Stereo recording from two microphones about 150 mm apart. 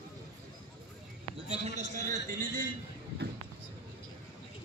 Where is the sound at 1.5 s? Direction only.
50° right (ahead or behind).